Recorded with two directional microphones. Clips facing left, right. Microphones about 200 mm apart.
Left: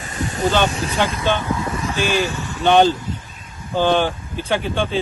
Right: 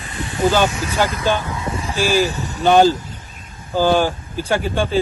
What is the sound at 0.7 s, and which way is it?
Speech, 30° left (ahead or behind).